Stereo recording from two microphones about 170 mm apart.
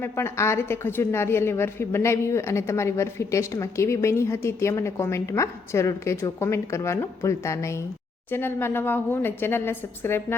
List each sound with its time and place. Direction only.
0.0 s a woman's voice: 15° left (ahead or behind)